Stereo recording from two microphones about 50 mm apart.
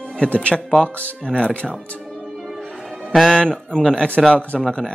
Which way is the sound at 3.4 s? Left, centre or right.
Centre.